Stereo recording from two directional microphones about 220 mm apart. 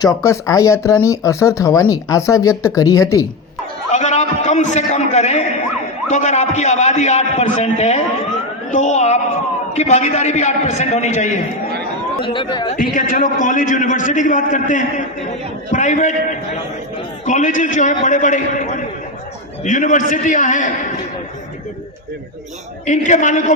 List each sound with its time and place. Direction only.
0.0 s speech: 15° left (ahead or behind)
3.9 s a man's voice: 30° left (ahead or behind)
12.7 s a man's voice: 40° left (ahead or behind)
17.2 s a man's voice: 35° left (ahead or behind)
22.9 s a man's voice: 35° left (ahead or behind)